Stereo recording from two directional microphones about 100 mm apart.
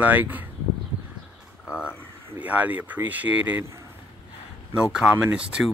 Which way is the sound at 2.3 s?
15° right (ahead or behind).